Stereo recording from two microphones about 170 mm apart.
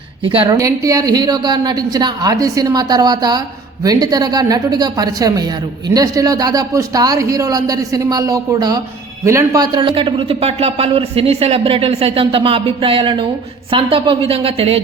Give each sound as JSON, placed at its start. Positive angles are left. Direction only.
{"t": 0.3, "sound": "a man's voice", "side_deg": -30}
{"t": 0.5, "sound": "a man's voice", "side_deg": -20}